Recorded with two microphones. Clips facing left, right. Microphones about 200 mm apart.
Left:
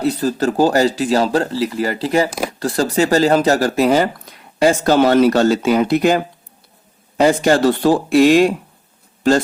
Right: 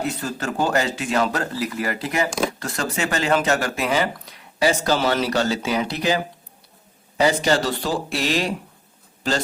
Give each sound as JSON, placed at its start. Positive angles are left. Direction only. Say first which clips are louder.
{"t": 0.0, "sound": "speech", "louder": "left 9 dB", "side_deg": 35}